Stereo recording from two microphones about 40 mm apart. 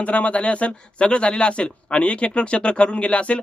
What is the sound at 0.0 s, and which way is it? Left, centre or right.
A man's voice, left.